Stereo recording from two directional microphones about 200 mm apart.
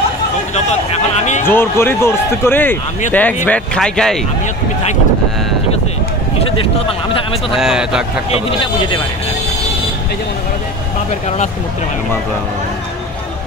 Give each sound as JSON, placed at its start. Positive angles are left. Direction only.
{"t": 0.7, "sound": "speech", "side_deg": 35}
{"t": 1.4, "sound": "a man's voice", "side_deg": 10}
{"t": 7.5, "sound": "speech", "side_deg": -5}
{"t": 8.3, "sound": "speech", "side_deg": 25}